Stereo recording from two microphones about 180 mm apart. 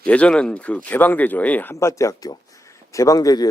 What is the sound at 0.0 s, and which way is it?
Speech, 5° left (ahead or behind).